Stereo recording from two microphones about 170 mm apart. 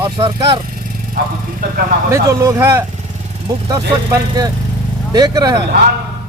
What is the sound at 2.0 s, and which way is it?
Speech, 20° right (ahead or behind).